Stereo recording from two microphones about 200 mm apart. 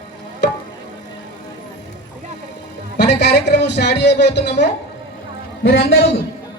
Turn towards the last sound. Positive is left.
turn(degrees=50)  # may be behind; listen again after turning